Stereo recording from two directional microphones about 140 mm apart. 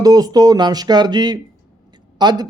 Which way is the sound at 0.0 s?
25° right (ahead or behind).